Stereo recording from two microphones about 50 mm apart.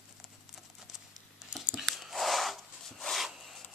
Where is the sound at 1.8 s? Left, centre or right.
Centre.